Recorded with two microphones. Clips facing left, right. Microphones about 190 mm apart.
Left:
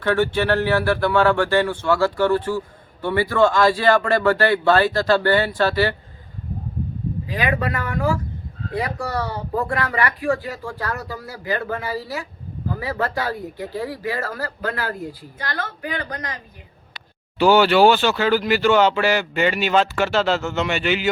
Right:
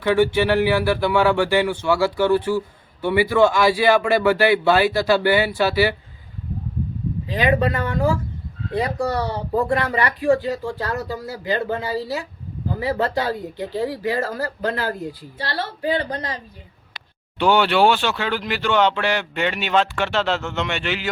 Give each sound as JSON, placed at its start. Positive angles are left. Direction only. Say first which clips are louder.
{"t": 0.0, "sound": "speech", "louder": "right 2 dB", "side_deg": -10}
{"t": 7.3, "sound": "a woman's voice", "louder": "right 5 dB", "side_deg": -25}
{"t": 17.3, "sound": "speech", "louder": "left 3 dB", "side_deg": 5}